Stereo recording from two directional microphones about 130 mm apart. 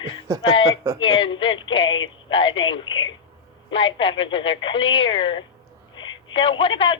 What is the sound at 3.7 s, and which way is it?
Speech, 40° left (ahead or behind).